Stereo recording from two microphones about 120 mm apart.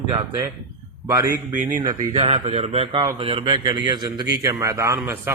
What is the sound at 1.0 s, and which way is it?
Speech, 30° right (ahead or behind).